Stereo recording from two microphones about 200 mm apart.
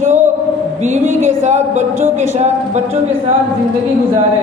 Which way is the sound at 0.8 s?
35° right (ahead or behind).